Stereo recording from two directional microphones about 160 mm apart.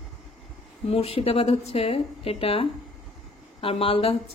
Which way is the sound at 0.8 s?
40° left (ahead or behind).